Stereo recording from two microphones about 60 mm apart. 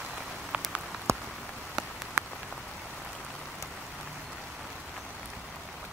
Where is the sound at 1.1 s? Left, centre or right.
Right.